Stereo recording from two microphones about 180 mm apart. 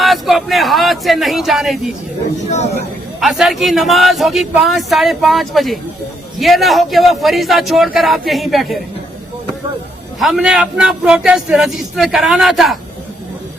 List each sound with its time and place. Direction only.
0.0 s a sound: centre (ahead or behind)
2.5 s speech: 40° left (ahead or behind)
3.2 s a man's voice: centre (ahead or behind)
10.2 s a man's voice: centre (ahead or behind)